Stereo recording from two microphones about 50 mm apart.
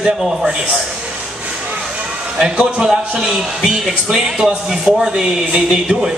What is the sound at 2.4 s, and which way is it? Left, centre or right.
A man's voice, centre.